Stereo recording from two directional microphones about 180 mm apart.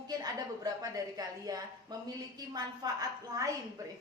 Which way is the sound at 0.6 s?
20° right (ahead or behind).